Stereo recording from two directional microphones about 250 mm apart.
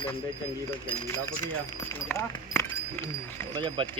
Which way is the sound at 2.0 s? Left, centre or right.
Centre.